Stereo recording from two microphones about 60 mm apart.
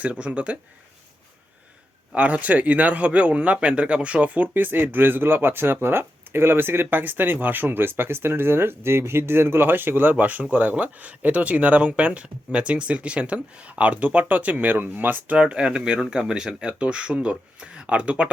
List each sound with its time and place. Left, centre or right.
0.0 s a man's voice: right
2.1 s a man's voice: right
15.4 s speech: centre